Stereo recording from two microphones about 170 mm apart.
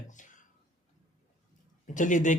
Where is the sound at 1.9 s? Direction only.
50° left (ahead or behind).